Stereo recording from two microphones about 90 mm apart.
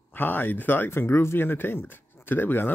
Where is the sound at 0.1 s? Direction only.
20° left (ahead or behind).